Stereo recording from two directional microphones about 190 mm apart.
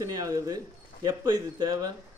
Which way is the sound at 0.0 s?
20° right (ahead or behind).